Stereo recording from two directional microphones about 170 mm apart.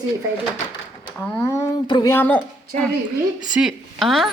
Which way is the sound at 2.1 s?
10° left (ahead or behind).